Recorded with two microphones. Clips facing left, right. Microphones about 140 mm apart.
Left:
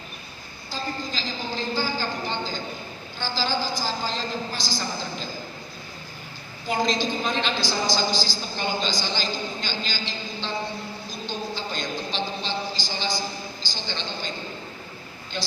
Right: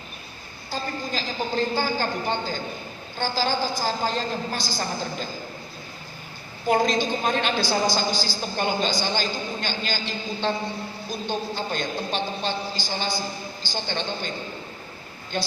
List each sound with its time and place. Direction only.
0.7 s a woman's voice: 55° right (ahead or behind)
6.7 s a woman's voice: 55° right (ahead or behind)
11.3 s a sound: 55° right (ahead or behind)
13.7 s a woman's voice: 55° right (ahead or behind)
15.3 s a woman's voice: 50° right (ahead or behind)